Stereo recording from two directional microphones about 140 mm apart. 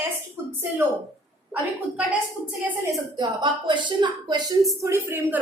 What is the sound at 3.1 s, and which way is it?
Speech, 35° right (ahead or behind).